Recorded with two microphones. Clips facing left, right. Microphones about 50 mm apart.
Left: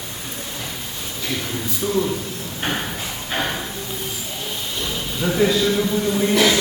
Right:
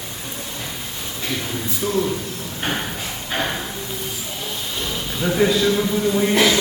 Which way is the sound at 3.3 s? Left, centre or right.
Centre.